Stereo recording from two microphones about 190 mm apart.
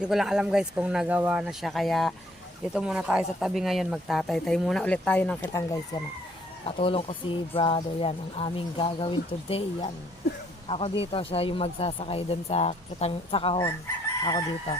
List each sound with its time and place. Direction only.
0.0 s speech: centre (ahead or behind); by 6.0 s 15° left (ahead or behind)
6.7 s speech: 30° left (ahead or behind)